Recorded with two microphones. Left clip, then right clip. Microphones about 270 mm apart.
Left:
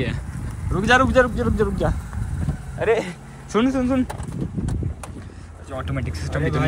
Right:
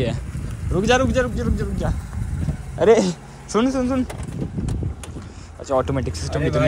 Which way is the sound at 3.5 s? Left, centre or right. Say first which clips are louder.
Even; centre.